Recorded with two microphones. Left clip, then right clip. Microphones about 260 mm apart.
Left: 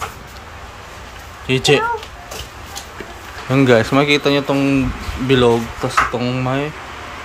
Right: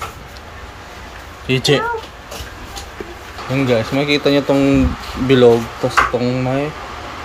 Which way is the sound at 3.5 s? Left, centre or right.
Centre.